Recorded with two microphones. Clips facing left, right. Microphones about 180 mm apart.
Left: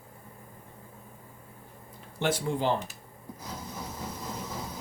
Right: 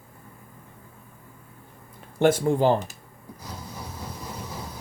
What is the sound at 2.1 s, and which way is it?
Speech, 50° right (ahead or behind).